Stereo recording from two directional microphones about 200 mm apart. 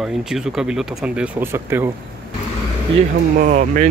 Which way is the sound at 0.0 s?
Centre (ahead or behind).